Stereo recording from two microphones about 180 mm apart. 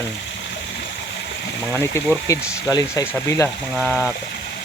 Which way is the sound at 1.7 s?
15° left (ahead or behind).